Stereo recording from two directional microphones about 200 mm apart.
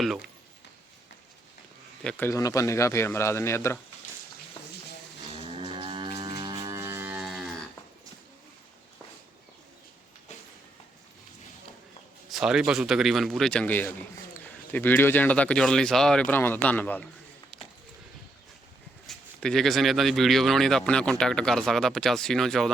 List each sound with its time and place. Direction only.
0.0 s speech: centre (ahead or behind)
2.0 s speech: 10° left (ahead or behind)
5.4 s livestock: 30° right (ahead or behind); by 7.5 s 5° right (ahead or behind)
12.3 s speech: centre (ahead or behind)
19.0 s speech: 5° left (ahead or behind)